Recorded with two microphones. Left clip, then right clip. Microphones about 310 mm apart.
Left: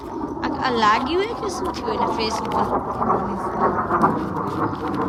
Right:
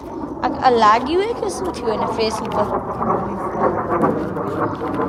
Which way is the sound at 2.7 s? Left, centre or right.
Centre.